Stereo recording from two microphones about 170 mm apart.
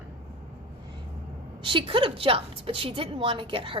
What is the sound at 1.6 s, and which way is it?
A woman's voice, 30° right (ahead or behind).